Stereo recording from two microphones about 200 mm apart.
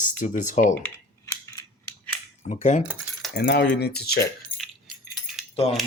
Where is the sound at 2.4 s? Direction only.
35° left (ahead or behind).